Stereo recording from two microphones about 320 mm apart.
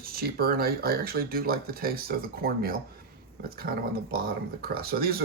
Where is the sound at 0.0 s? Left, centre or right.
Right.